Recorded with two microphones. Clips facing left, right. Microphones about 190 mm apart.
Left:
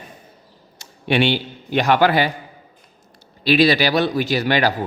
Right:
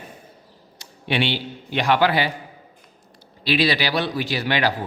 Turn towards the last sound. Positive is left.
turn(degrees=45)  # may be behind; listen again after turning